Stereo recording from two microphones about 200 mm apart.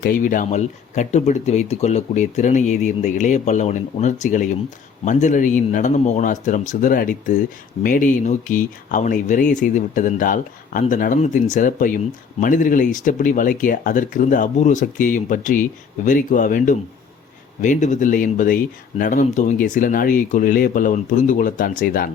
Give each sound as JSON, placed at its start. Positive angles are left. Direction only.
{"t": 0.0, "sound": "speech", "side_deg": 45}